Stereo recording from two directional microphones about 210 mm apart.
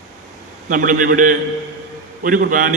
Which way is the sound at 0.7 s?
40° right (ahead or behind).